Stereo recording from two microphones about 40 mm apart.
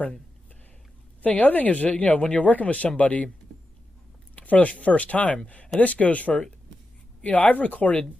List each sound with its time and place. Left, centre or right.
1.2 s speech: left
4.4 s speech: left